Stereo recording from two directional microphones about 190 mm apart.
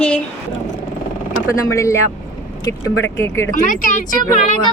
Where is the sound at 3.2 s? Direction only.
15° left (ahead or behind).